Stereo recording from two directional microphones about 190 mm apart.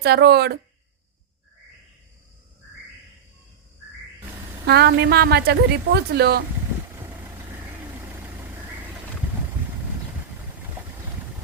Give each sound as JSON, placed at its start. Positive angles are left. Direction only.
{"t": 0.0, "sound": "a woman's voice", "side_deg": -60}
{"t": 4.6, "sound": "a woman's voice", "side_deg": -60}